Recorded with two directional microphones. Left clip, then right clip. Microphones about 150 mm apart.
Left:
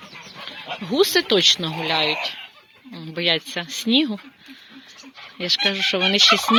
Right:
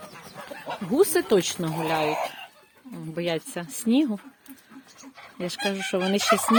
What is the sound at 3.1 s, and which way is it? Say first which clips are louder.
Speech: left 7 dB; 5° right (ahead or behind).